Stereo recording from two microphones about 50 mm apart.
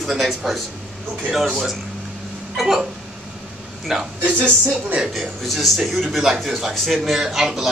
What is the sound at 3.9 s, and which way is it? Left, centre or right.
Speech, centre.